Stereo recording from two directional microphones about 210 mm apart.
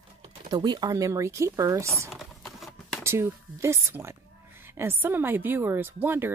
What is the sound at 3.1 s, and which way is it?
Speech, 10° right (ahead or behind).